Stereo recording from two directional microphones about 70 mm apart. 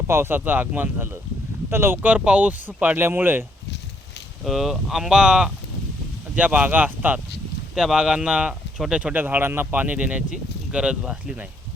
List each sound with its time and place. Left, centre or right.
0.1 s speech: right
2.0 s speech: centre
4.4 s speech: centre
6.3 s speech: right
7.8 s speech: centre
9.1 s speech: right